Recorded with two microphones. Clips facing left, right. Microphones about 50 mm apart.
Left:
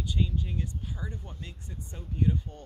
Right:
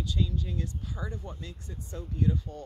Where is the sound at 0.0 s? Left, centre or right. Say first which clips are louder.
Even; centre.